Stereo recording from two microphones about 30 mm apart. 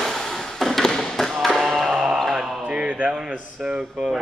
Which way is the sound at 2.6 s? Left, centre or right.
Right.